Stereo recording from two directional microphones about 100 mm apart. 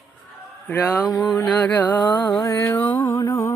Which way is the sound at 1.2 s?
5° left (ahead or behind).